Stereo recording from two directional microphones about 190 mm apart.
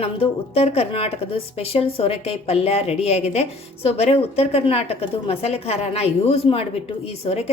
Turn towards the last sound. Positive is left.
turn(degrees=30)  # may be behind; listen again after turning